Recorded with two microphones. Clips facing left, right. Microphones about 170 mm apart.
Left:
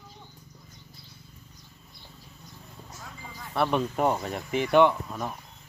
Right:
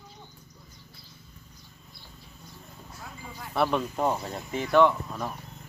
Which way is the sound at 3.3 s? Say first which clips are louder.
Right 1 dB; 5° right (ahead or behind).